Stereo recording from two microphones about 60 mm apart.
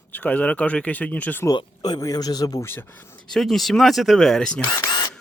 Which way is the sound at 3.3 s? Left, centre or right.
Centre.